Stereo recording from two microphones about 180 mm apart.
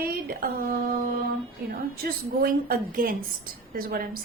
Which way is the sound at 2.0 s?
55° right (ahead or behind).